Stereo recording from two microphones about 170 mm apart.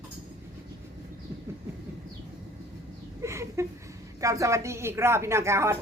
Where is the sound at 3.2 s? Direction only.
15° right (ahead or behind).